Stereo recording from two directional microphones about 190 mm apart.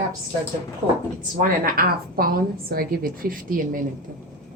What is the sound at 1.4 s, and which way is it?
A woman's voice, 50° right (ahead or behind).